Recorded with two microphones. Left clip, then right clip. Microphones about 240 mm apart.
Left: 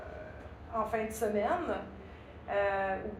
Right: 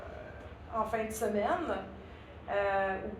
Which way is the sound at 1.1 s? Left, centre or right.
Right.